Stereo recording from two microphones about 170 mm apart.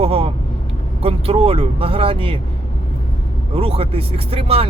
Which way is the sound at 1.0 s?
35° right (ahead or behind).